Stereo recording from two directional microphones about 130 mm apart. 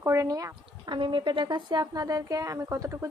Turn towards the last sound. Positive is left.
turn(degrees=-25)  # may be behind; listen again after turning